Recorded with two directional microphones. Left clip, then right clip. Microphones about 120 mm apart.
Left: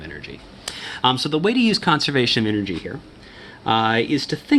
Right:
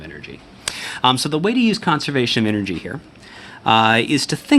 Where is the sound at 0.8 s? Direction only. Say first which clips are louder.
Right 2 dB; 55° right (ahead or behind).